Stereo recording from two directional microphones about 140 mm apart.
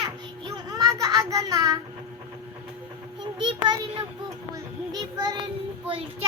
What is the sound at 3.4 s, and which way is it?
Speech, 35° right (ahead or behind).